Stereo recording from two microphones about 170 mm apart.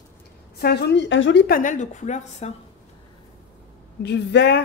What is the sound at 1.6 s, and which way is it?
Speech, 50° left (ahead or behind).